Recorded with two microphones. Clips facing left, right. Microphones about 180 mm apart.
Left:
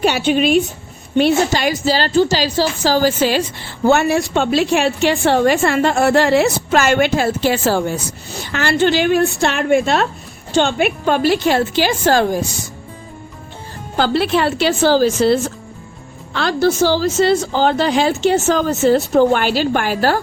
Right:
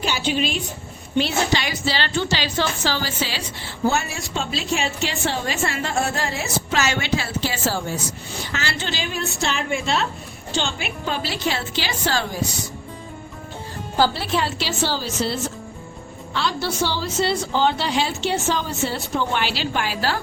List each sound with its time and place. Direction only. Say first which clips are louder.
0.0 s a woman's voice: left 8 dB; 60° left (ahead or behind)
3.8 s a woman's voice: left 9 dB; 60° left (ahead or behind)
6.7 s a woman's voice: left 8 dB; 50° left (ahead or behind)
13.9 s a woman's voice: left 5 dB; 65° left (ahead or behind)
15.0 s a woman's voice: left 11 dB; 50° left (ahead or behind)